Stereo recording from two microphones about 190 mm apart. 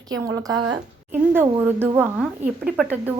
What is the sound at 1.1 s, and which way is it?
A woman's voice, 10° right (ahead or behind).